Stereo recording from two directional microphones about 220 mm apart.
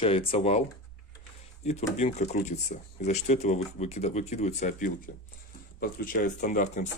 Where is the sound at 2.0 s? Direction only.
30° left (ahead or behind).